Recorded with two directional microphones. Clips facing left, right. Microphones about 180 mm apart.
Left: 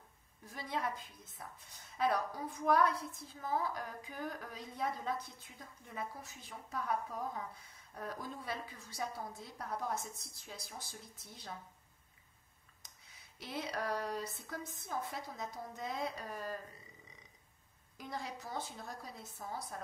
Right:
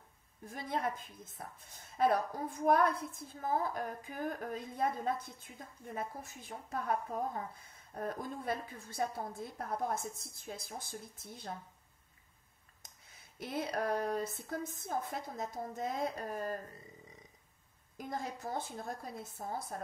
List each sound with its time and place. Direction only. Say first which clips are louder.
0.5 s a woman's voice: right 3 dB; 50° right (ahead or behind)
13.4 s a woman's voice: right 4 dB; 50° right (ahead or behind)
17.9 s a woman's voice: right 3 dB; 50° right (ahead or behind)